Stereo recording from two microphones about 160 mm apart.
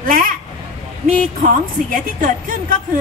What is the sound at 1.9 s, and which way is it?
Speech, 60° right (ahead or behind).